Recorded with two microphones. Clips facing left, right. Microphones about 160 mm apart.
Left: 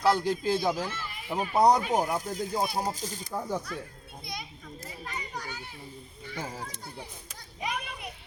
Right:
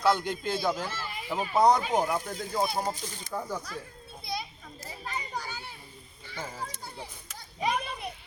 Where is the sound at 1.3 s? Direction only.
Centre (ahead or behind).